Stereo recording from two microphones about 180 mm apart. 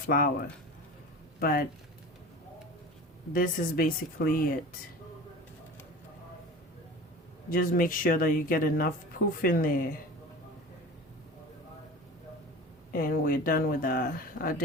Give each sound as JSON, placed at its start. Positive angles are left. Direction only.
{"t": 0.1, "sound": "speech", "side_deg": 55}
{"t": 1.4, "sound": "speech", "side_deg": 55}
{"t": 3.3, "sound": "speech", "side_deg": 50}
{"t": 7.5, "sound": "speech", "side_deg": 50}
{"t": 12.9, "sound": "speech", "side_deg": 55}